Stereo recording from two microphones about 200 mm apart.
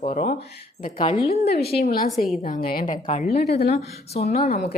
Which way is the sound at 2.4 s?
45° left (ahead or behind).